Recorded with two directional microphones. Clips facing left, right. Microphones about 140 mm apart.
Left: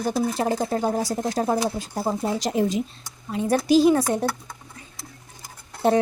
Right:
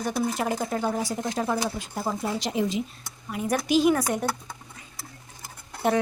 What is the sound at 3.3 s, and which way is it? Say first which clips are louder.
Speech: left 5 dB; 30° left (ahead or behind).